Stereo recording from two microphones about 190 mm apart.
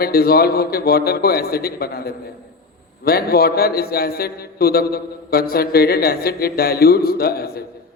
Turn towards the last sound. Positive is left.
turn(degrees=55)  # may be behind; listen again after turning